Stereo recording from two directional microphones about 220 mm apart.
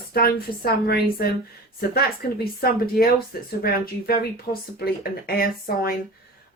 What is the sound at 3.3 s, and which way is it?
Speech, 45° left (ahead or behind).